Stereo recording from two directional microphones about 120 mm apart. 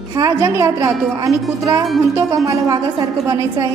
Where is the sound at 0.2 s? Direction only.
25° right (ahead or behind).